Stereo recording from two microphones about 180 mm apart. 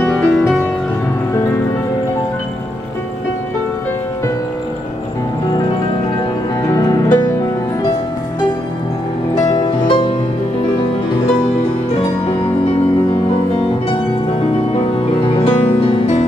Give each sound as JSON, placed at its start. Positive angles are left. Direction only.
{"t": 0.0, "sound": "music", "side_deg": 5}
{"t": 6.7, "sound": "music", "side_deg": 20}
{"t": 9.3, "sound": "music", "side_deg": 20}
{"t": 15.2, "sound": "music", "side_deg": 30}